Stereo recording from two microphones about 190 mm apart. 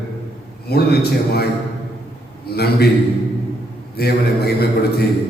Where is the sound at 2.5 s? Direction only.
55° left (ahead or behind).